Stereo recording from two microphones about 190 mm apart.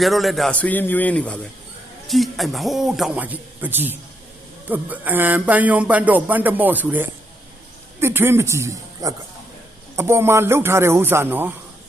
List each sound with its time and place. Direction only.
0.0 s a man's voice: centre (ahead or behind)